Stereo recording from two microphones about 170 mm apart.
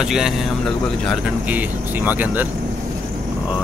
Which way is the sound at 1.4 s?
10° right (ahead or behind).